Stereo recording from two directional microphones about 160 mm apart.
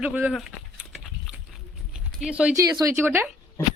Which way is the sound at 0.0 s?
5° right (ahead or behind).